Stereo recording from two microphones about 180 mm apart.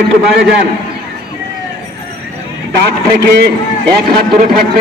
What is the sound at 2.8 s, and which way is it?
Speech, 65° right (ahead or behind).